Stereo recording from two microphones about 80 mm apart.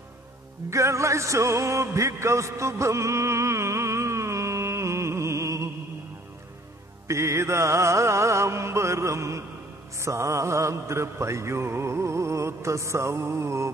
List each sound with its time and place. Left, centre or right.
0.7 s music: right
7.1 s music: right
9.9 s mantra: right